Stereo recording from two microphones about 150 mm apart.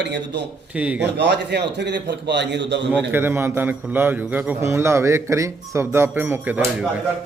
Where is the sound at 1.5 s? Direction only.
90° right.